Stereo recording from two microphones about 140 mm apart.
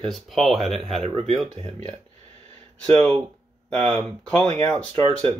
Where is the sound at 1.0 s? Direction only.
40° right (ahead or behind).